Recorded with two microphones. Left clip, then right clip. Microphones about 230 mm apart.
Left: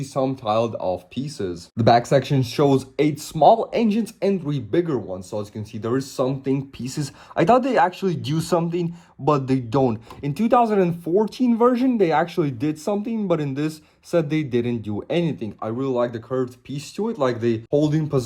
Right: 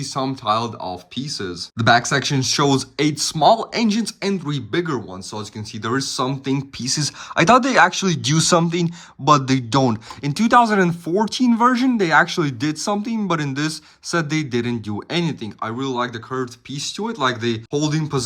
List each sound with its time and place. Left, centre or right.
0.0 s speech: centre
11.0 s speech: right
11.3 s speech: centre